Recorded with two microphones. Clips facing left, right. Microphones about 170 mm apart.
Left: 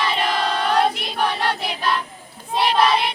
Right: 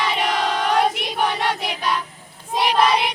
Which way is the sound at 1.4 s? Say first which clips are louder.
Even; 15° right (ahead or behind).